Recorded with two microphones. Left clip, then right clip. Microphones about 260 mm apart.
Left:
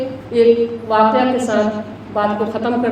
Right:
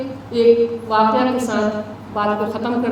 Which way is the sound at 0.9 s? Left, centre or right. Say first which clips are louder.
Left 3 dB; centre.